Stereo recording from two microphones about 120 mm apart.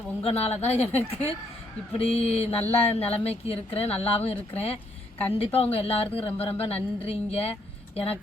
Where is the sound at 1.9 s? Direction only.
55° left (ahead or behind).